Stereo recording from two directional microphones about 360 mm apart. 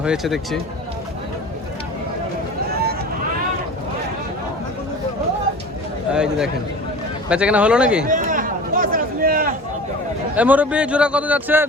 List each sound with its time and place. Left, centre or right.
0.0 s a man's voice: centre
6.1 s a man's voice: centre
8.0 s a sound: right
10.3 s a man's voice: centre